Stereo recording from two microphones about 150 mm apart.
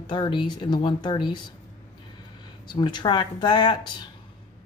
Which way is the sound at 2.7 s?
30° left (ahead or behind).